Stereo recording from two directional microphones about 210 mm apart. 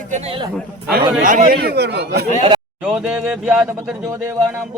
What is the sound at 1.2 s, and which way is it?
Speech, 40° right (ahead or behind).